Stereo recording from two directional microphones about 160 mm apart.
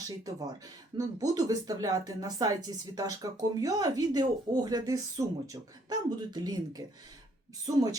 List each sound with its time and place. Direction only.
0.3 s speech: 25° right (ahead or behind)